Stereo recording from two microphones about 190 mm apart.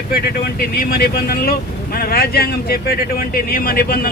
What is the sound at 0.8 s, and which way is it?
Speech, 55° left (ahead or behind).